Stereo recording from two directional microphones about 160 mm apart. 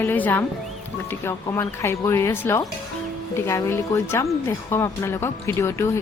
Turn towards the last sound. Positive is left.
turn(degrees=15)  # may be behind; listen again after turning